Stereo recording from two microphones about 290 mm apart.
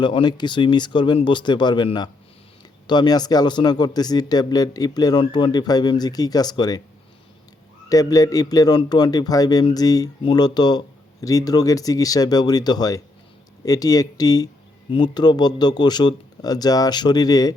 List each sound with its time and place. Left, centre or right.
0.0 s a man's voice: centre
7.9 s a man's voice: centre